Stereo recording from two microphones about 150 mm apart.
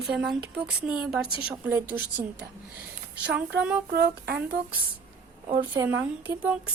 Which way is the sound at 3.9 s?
90° right.